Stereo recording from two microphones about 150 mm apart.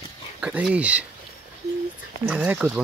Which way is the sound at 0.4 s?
10° right (ahead or behind).